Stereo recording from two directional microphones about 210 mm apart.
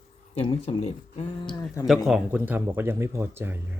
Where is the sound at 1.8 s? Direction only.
Centre (ahead or behind).